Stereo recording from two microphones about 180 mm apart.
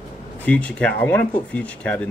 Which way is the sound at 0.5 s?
5° left (ahead or behind).